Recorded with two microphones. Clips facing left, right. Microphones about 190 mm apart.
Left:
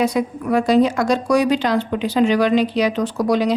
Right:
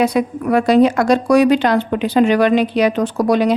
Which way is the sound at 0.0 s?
65° right (ahead or behind).